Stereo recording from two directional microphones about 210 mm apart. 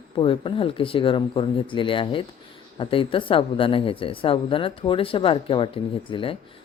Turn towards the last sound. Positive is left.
turn(degrees=25)  # may be behind; listen again after turning